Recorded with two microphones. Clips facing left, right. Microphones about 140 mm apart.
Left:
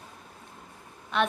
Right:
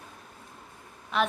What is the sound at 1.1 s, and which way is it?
Speech, centre (ahead or behind).